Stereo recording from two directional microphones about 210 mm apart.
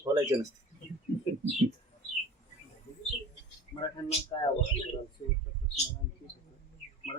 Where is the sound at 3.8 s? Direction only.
25° left (ahead or behind).